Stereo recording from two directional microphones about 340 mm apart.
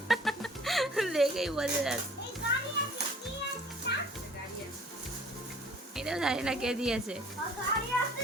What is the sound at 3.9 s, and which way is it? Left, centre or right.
Children playing, left.